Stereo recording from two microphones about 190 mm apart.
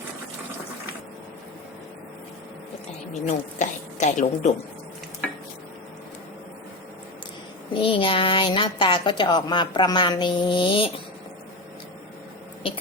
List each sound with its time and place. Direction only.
3.1 s a woman's voice: 40° left (ahead or behind)
7.7 s a woman's voice: 25° left (ahead or behind)